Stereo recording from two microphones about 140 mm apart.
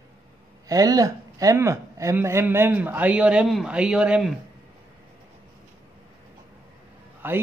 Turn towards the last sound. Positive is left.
turn(degrees=-15)  # may be behind; listen again after turning